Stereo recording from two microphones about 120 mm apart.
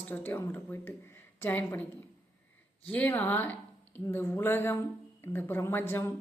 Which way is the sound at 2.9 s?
15° left (ahead or behind).